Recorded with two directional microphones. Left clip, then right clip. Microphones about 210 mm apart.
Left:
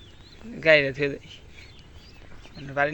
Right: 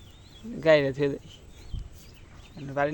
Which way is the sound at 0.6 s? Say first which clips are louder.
Left 2 dB; 20° right (ahead or behind).